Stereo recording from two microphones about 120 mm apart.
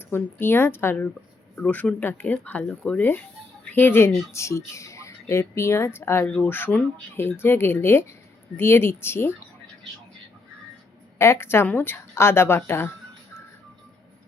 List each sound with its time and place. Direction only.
0.0 s speech: 15° left (ahead or behind)
11.2 s speech: 20° left (ahead or behind)